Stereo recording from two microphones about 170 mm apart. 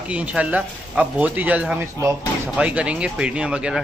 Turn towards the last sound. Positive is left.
turn(degrees=-5)  # may be behind; listen again after turning